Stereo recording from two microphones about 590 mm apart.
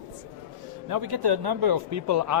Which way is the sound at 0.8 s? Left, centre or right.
Right.